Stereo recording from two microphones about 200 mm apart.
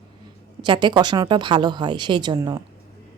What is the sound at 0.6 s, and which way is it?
Speech, 25° right (ahead or behind).